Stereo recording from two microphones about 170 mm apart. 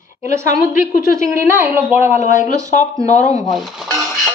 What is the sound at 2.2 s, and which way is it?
Speech, 50° left (ahead or behind).